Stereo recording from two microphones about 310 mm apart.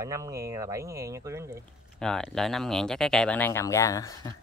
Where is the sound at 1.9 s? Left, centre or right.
Centre.